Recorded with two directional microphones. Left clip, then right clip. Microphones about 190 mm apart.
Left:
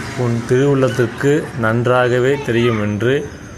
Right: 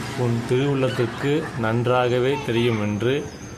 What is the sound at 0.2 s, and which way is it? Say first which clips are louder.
Speech: left 7 dB; 10° left (ahead or behind).